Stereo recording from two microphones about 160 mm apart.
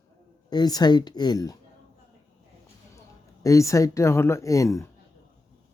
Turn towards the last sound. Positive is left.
turn(degrees=20)  # may be behind; listen again after turning